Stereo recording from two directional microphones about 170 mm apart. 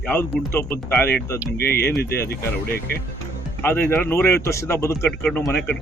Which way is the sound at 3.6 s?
15° left (ahead or behind).